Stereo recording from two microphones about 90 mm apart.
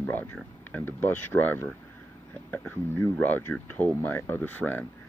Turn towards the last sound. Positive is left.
turn(degrees=20)  # may be behind; listen again after turning